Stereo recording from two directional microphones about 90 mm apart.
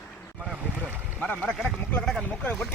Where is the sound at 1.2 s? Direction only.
20° left (ahead or behind).